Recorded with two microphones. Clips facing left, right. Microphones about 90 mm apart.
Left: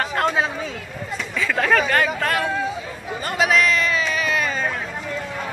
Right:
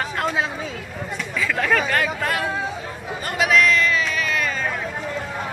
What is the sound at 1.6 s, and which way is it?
Speech, centre (ahead or behind).